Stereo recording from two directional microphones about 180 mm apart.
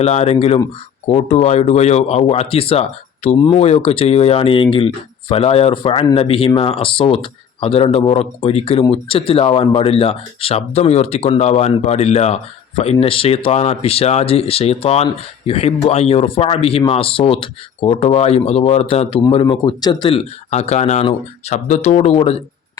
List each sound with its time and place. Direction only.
0.0 s speech: 35° left (ahead or behind)